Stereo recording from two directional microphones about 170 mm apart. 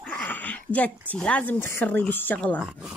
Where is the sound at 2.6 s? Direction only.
5° right (ahead or behind).